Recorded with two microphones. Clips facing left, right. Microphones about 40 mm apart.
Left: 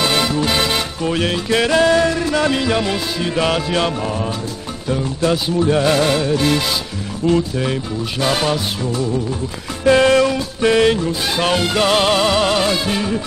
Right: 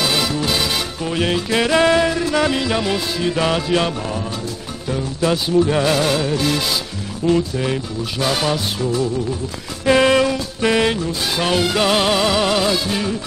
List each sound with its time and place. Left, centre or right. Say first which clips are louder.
0.0 s music: left 2 dB; centre
1.8 s music: even; centre
2.1 s music: left 1 dB; centre
5.7 s music: left 2 dB; centre
9.8 s music: left 2 dB; centre
10.2 s music: left 2 dB; centre
11.0 s music: left 2 dB; centre